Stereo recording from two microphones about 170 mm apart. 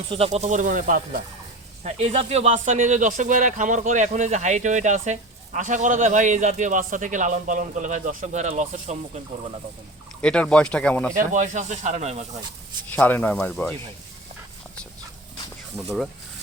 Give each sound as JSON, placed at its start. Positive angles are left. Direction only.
{"t": 0.1, "sound": "a man's voice", "side_deg": -35}
{"t": 1.8, "sound": "a man's voice", "side_deg": -40}
{"t": 10.2, "sound": "speech", "side_deg": 5}
{"t": 11.1, "sound": "a man's voice", "side_deg": -50}
{"t": 12.9, "sound": "speech", "side_deg": 10}